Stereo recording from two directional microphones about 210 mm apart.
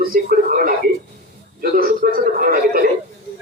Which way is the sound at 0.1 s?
45° right (ahead or behind).